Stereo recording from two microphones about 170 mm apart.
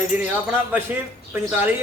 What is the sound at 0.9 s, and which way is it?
Speech, 10° right (ahead or behind).